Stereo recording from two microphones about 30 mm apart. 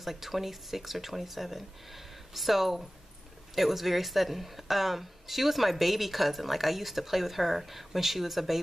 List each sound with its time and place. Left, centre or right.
0.0 s speech: centre